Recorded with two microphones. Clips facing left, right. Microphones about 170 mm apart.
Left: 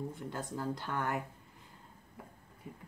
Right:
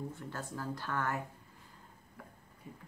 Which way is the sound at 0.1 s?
15° left (ahead or behind).